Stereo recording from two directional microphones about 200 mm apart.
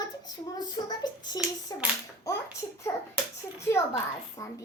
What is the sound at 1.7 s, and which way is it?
Speech, 20° left (ahead or behind).